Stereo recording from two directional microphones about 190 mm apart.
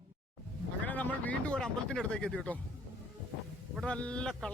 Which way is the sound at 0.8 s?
10° left (ahead or behind).